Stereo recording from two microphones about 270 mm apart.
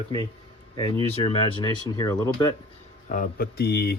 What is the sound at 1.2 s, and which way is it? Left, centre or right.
Speech, centre.